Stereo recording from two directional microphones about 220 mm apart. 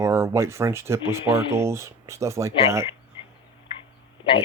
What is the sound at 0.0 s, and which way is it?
Speech, 10° right (ahead or behind).